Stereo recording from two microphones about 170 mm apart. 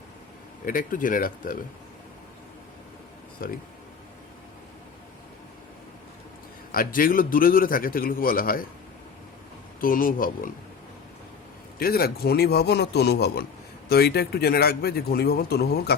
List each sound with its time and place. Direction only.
0.6 s speech: 55° left (ahead or behind)
3.4 s a man's voice: 55° left (ahead or behind)
6.7 s a man's voice: 55° left (ahead or behind)
9.8 s speech: 55° left (ahead or behind)
11.8 s a man's voice: 60° left (ahead or behind)